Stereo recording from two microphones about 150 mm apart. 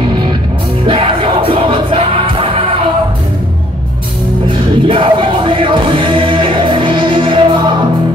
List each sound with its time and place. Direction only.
0.8 s music: 35° right (ahead or behind)
4.5 s music: 35° right (ahead or behind)